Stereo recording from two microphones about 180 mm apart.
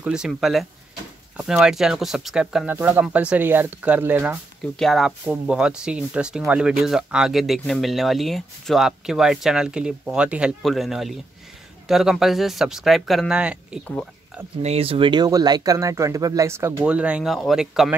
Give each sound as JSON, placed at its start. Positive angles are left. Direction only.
{"t": 0.0, "sound": "speech", "side_deg": -5}
{"t": 4.7, "sound": "speech", "side_deg": 0}
{"t": 14.6, "sound": "speech", "side_deg": -35}